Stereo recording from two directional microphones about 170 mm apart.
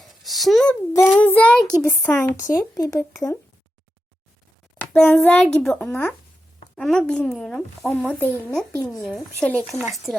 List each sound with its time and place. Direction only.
0.0 s a sound: centre (ahead or behind)
0.9 s child singing: 10° left (ahead or behind)
1.8 s a child's voice: 10° left (ahead or behind)
4.8 s a child's voice: centre (ahead or behind)